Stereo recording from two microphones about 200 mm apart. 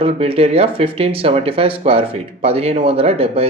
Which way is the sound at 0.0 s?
30° right (ahead or behind).